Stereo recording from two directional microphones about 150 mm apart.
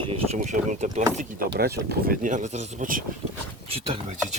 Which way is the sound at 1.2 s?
75° right (ahead or behind).